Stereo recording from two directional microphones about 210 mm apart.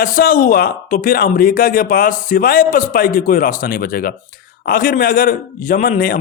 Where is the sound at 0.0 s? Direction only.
40° left (ahead or behind).